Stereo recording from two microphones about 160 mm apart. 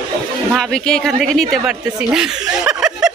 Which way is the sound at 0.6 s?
5° left (ahead or behind).